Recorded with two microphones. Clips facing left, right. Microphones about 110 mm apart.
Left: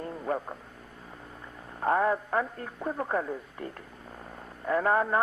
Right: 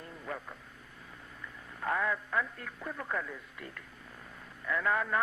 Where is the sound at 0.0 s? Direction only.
40° left (ahead or behind).